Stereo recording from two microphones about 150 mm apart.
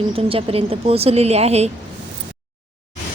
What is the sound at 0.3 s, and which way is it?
A woman's voice, 40° right (ahead or behind).